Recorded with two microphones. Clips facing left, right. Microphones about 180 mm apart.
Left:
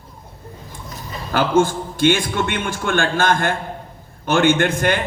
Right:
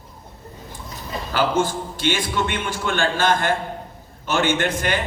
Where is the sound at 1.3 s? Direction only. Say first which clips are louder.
Left 4 dB; 50° left (ahead or behind).